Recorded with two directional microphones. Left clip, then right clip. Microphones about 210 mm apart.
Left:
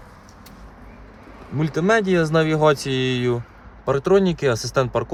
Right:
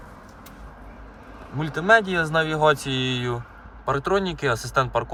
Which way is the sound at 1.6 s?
45° left (ahead or behind).